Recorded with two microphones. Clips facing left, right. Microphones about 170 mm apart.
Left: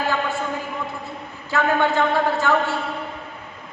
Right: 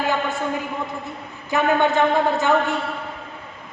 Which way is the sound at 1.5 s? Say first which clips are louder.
Right 1 dB; 20° right (ahead or behind).